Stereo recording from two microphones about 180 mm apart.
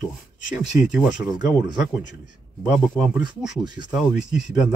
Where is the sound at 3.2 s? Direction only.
25° right (ahead or behind).